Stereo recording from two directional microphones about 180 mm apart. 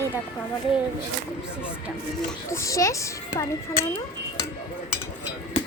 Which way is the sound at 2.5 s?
15° left (ahead or behind).